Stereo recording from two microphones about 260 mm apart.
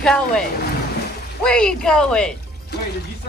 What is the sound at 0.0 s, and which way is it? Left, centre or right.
Speech, centre.